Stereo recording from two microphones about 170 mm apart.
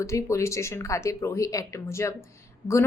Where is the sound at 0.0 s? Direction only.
15° left (ahead or behind).